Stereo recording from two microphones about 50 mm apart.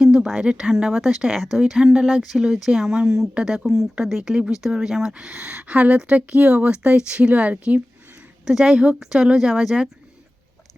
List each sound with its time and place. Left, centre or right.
0.0 s a sound: centre
0.3 s speech: centre
1.8 s speech: centre
2.0 s speech: centre; by 7.8 s right
8.4 s speech: centre